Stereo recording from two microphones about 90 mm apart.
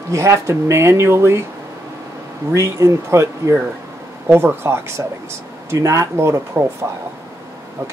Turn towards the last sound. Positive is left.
turn(degrees=-30)  # may be behind; listen again after turning